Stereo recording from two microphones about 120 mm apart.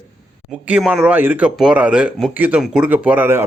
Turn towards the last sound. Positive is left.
turn(degrees=-15)  # may be behind; listen again after turning